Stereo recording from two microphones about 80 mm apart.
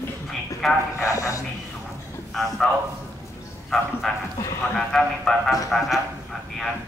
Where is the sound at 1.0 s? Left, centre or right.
Left.